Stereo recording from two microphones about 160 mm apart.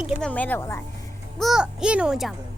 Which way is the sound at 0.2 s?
10° left (ahead or behind).